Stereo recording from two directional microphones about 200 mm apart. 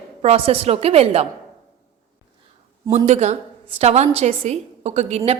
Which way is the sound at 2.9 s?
35° right (ahead or behind).